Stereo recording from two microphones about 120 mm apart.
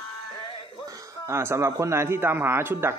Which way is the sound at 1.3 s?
20° right (ahead or behind).